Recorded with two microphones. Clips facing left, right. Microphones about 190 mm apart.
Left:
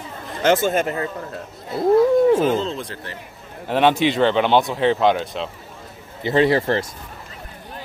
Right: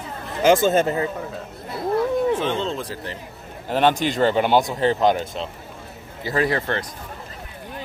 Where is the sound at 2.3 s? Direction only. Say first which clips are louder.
Left 5 dB; 5° left (ahead or behind).